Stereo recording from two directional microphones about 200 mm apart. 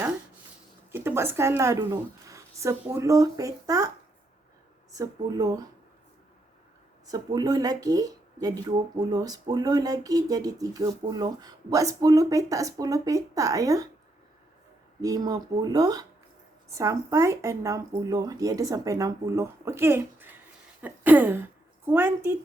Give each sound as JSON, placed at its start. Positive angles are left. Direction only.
{"t": 0.9, "sound": "speech", "side_deg": -10}
{"t": 4.9, "sound": "speech", "side_deg": -20}
{"t": 7.1, "sound": "speech", "side_deg": -20}
{"t": 15.0, "sound": "a woman's voice", "side_deg": -20}